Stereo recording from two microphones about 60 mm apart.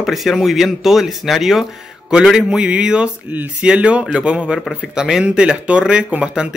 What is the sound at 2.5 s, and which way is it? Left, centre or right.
Speech, centre.